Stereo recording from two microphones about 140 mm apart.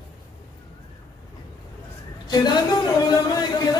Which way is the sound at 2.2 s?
30° left (ahead or behind).